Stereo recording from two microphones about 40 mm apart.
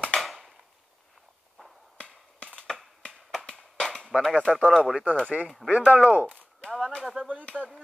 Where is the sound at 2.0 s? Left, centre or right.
Left.